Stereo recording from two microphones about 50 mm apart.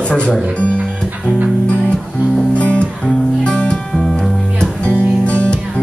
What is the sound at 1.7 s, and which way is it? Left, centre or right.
Music, left.